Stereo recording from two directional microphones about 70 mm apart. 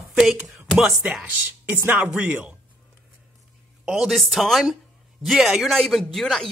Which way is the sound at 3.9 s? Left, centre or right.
Centre.